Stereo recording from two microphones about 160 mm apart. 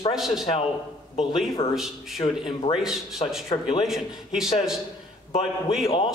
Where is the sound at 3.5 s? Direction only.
35° left (ahead or behind).